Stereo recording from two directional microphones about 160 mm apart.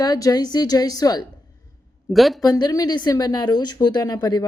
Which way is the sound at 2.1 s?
Centre (ahead or behind).